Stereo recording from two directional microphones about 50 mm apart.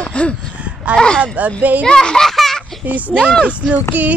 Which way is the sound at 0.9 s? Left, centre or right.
Centre.